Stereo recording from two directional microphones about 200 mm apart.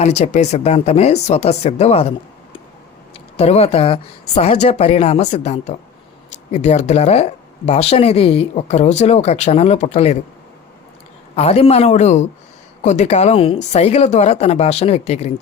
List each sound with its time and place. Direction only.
0.0 s speech: 35° left (ahead or behind)
11.3 s speech: 30° left (ahead or behind)